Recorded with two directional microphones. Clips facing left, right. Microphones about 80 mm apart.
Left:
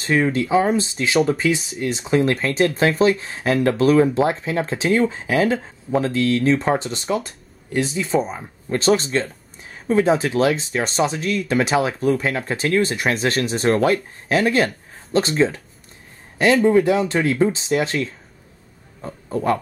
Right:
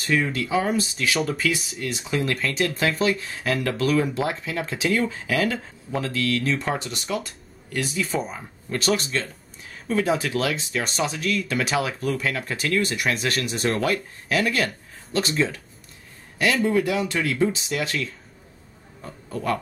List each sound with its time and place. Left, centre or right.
0.0 s speech: left
16.6 s speech: left